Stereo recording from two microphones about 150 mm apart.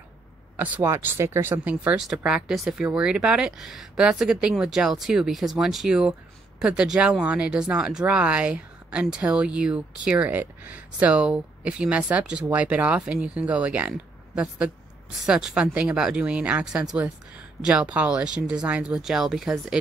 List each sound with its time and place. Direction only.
0.6 s speech: 10° right (ahead or behind)